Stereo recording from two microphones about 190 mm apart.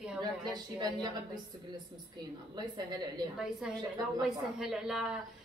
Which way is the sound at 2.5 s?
20° right (ahead or behind).